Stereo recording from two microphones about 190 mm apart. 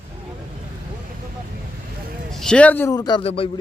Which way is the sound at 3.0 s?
25° left (ahead or behind).